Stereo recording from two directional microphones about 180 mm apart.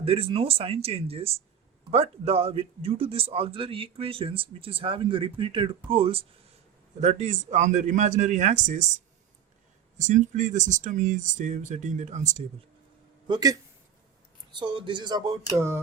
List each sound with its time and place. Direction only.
0.0 s a man's voice: 30° right (ahead or behind)
10.0 s speech: 40° right (ahead or behind)
13.2 s speech: 20° right (ahead or behind)